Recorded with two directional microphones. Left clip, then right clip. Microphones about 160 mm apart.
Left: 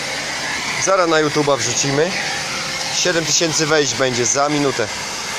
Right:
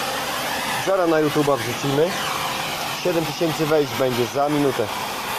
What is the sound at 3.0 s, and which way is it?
Speech, 10° left (ahead or behind).